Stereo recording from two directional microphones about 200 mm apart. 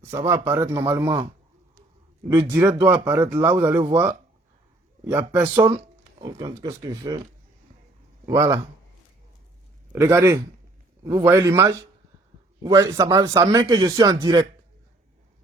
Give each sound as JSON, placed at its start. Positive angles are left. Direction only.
{"t": 0.3, "sound": "a man's voice", "side_deg": -15}
{"t": 3.1, "sound": "a man's voice", "side_deg": -10}
{"t": 3.8, "sound": "speech", "side_deg": -25}
{"t": 5.0, "sound": "a man's voice", "side_deg": -10}
{"t": 5.5, "sound": "a sound", "side_deg": -25}
{"t": 6.3, "sound": "a man's voice", "side_deg": -15}
{"t": 8.3, "sound": "a man's voice", "side_deg": -15}
{"t": 9.9, "sound": "a man's voice", "side_deg": -15}